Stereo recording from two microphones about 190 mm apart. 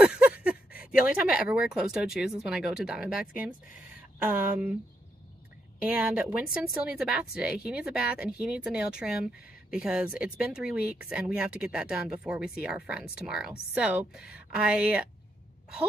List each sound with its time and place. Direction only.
0.0 s a sound: 5° right (ahead or behind)
1.7 s speech: 5° right (ahead or behind)
5.8 s speech: 5° right (ahead or behind)